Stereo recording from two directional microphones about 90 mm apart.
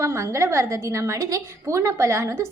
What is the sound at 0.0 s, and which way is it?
A woman's voice, 30° right (ahead or behind).